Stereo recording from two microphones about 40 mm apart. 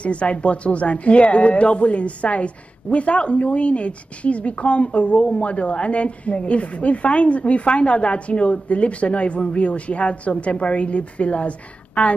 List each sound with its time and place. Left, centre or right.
0.0 s speech: left